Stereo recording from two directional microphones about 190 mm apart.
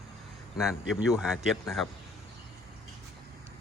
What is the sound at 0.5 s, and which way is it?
Speech, 5° right (ahead or behind).